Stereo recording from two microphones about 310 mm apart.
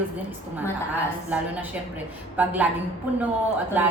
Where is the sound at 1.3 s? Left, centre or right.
Centre.